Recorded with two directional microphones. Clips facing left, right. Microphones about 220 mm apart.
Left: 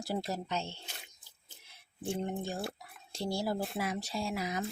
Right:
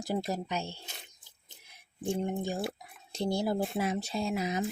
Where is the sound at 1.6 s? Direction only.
10° right (ahead or behind).